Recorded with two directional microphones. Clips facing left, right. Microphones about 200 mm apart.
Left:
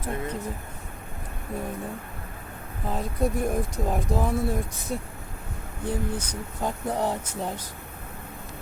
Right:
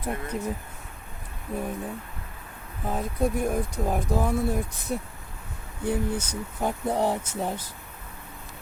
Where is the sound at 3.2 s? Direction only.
Centre (ahead or behind).